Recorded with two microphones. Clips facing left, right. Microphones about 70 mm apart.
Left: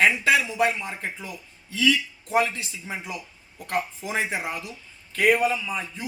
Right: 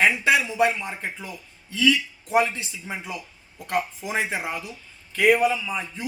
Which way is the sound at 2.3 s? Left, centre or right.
Centre.